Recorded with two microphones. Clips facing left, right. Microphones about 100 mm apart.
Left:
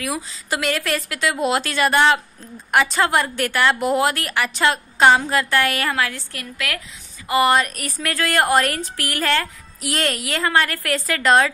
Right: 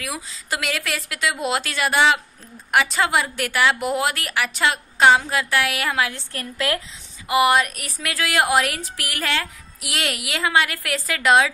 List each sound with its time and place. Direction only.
0.0 s speech: centre (ahead or behind); by 6.2 s 15° right (ahead or behind)
6.3 s a woman's voice: 30° right (ahead or behind)
7.2 s speech: 10° right (ahead or behind)